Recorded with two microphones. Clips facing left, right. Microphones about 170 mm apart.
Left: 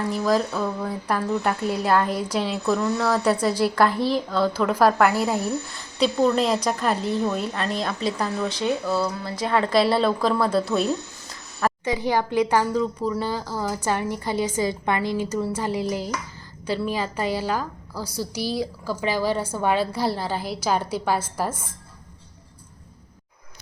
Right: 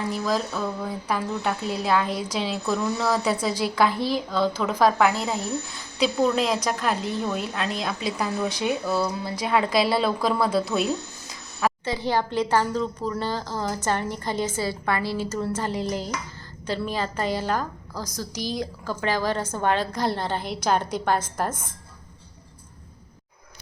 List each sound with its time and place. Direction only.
0.3 s a woman's voice: 5° left (ahead or behind)
3.9 s speech: 35° left (ahead or behind)
4.3 s a woman's voice: 5° left (ahead or behind)
6.0 s a woman's voice: centre (ahead or behind)
11.9 s a woman's voice: 15° left (ahead or behind)